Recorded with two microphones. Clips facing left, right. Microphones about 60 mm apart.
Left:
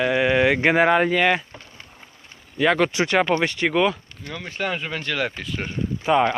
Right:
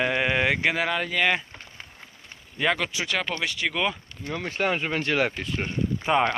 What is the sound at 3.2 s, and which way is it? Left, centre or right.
Speech, left.